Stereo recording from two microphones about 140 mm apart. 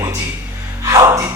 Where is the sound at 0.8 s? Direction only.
25° right (ahead or behind).